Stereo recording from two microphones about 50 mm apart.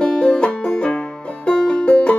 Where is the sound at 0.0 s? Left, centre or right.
Centre.